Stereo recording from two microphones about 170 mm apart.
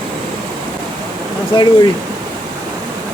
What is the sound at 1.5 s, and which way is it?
Speech, 30° left (ahead or behind).